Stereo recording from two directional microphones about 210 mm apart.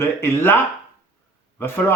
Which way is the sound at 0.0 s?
10° left (ahead or behind).